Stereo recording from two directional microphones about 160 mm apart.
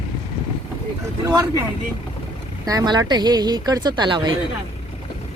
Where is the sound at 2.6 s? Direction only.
25° right (ahead or behind).